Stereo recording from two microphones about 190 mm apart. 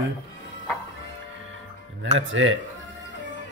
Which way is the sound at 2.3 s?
90° right.